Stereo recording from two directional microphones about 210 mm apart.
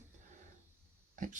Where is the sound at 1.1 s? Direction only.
40° right (ahead or behind).